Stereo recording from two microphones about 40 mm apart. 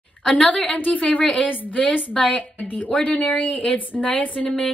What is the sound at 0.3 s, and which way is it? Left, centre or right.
A woman's voice, left.